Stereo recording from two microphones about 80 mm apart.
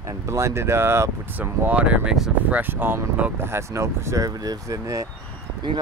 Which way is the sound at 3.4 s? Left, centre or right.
Right.